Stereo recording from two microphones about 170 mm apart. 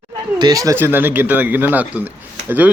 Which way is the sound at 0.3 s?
20° right (ahead or behind).